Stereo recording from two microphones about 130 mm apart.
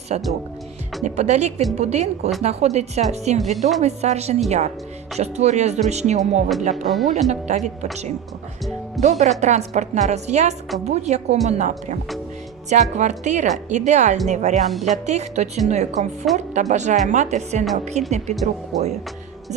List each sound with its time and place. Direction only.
0.1 s a woman's voice: 60° right (ahead or behind)
6.8 s speech: centre (ahead or behind)
7.1 s a woman's voice: 65° right (ahead or behind)
9.0 s a woman's voice: 60° right (ahead or behind)
16.2 s speech: centre (ahead or behind)
16.6 s a woman's voice: 65° right (ahead or behind)
18.7 s speech: centre (ahead or behind)